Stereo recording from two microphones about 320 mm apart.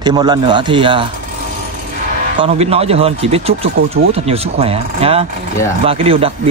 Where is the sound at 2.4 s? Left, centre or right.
Centre.